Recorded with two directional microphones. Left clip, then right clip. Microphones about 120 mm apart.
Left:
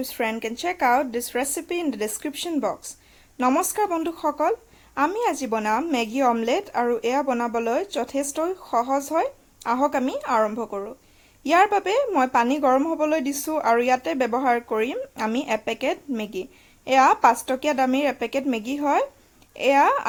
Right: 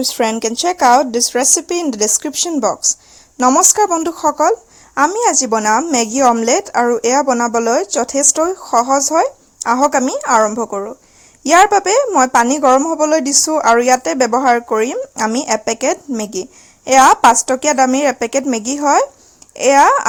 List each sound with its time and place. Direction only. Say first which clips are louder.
0.1 s speech: right 10 dB; 90° right
0.6 s speech: right 10 dB; 80° right
2.0 s speech: right 12 dB; 60° right (ahead or behind)